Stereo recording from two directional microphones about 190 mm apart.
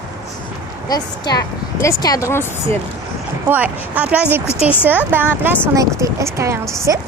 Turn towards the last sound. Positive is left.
turn(degrees=-15)  # may be behind; listen again after turning